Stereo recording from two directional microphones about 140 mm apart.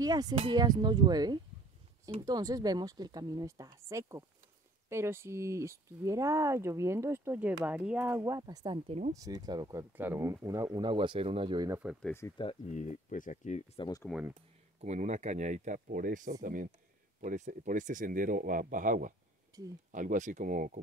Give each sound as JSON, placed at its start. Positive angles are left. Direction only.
{"t": 0.0, "sound": "speech", "side_deg": -25}
{"t": 9.1, "sound": "speech", "side_deg": -25}
{"t": 12.0, "sound": "speech", "side_deg": 20}
{"t": 12.7, "sound": "speech", "side_deg": 55}
{"t": 13.8, "sound": "speech", "side_deg": 40}
{"t": 14.3, "sound": "speech", "side_deg": -50}
{"t": 19.5, "sound": "speech", "side_deg": -25}
{"t": 19.9, "sound": "speech", "side_deg": -65}